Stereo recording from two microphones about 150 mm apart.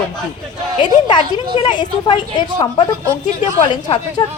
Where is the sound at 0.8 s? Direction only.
30° left (ahead or behind).